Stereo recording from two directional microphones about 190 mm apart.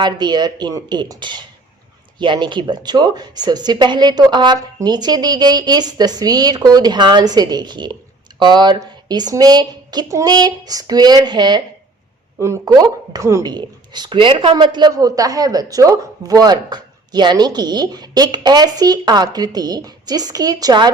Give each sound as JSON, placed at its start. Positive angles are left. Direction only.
{"t": 0.0, "sound": "a woman's voice", "side_deg": -20}